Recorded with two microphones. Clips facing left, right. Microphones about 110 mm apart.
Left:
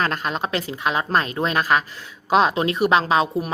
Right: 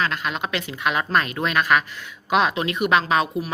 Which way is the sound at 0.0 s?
40° left (ahead or behind).